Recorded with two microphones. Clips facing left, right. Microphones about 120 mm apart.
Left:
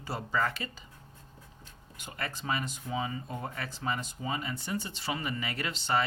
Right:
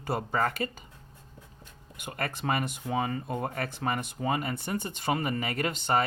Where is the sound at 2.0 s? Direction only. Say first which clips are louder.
Right 5 dB; 55° right (ahead or behind).